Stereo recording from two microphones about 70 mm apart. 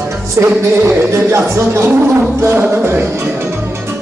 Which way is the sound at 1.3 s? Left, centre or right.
Right.